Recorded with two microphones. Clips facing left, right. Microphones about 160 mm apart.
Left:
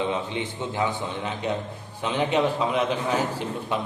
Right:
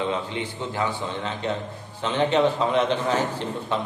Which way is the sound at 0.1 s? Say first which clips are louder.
Even; 20° left (ahead or behind).